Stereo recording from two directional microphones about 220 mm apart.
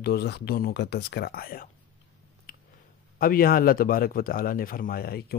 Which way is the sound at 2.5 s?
40° left (ahead or behind).